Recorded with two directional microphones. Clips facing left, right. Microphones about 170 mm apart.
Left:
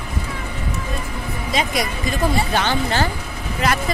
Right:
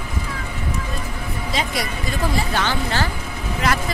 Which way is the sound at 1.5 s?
15° left (ahead or behind).